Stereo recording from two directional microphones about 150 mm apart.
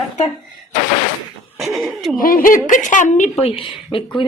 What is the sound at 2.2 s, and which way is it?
Speech, 70° left (ahead or behind).